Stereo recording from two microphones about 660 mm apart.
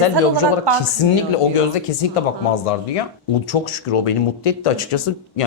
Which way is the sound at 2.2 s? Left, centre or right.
Left.